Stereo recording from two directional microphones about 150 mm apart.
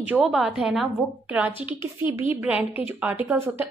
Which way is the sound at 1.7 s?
15° right (ahead or behind).